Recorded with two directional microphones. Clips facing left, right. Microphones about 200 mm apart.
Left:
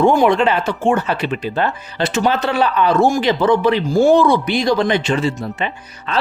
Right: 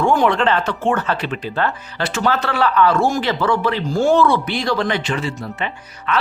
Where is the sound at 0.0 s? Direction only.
15° left (ahead or behind).